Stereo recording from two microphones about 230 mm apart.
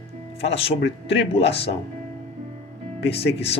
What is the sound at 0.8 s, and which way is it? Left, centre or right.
Speech, left.